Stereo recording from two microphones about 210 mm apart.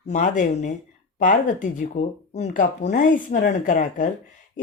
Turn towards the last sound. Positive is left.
turn(degrees=40)  # may be behind; listen again after turning